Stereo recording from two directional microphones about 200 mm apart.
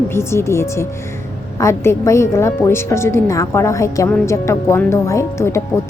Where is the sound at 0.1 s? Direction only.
15° left (ahead or behind).